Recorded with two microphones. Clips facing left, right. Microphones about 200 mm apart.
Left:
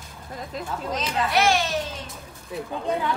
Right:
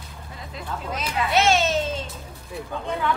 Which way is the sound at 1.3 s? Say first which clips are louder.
Right 3 dB; 25° right (ahead or behind).